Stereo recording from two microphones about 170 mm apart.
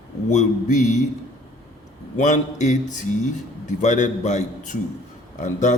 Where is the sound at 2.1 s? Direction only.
45° left (ahead or behind).